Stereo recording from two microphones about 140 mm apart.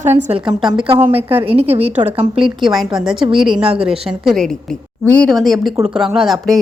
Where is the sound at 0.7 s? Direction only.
35° right (ahead or behind).